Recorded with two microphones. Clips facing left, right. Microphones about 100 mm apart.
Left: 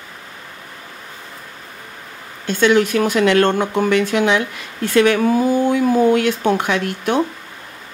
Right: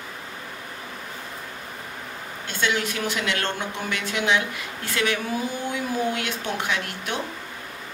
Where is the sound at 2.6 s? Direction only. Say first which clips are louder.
Left 11 dB; 50° left (ahead or behind).